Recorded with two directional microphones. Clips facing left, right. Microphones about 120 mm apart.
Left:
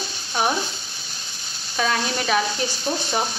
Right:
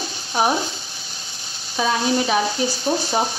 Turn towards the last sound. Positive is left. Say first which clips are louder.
# right 4 dB
turn(degrees=-25)  # may be behind; listen again after turning